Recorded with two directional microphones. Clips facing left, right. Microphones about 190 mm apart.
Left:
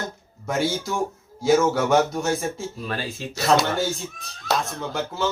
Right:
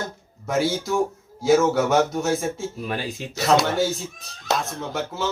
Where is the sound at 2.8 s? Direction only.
15° right (ahead or behind).